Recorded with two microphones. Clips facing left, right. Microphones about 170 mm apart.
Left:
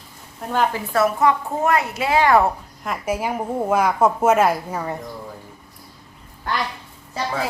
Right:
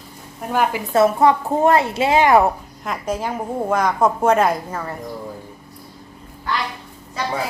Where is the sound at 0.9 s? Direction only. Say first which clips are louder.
Right 5 dB; 25° right (ahead or behind).